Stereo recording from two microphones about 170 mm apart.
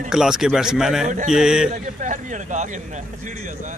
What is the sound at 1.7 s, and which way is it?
Speech, 45° right (ahead or behind).